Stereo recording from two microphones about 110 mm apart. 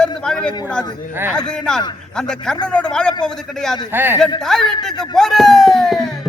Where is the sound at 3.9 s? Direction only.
20° right (ahead or behind).